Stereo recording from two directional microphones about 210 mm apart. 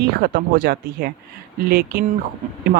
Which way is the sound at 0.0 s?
45° right (ahead or behind).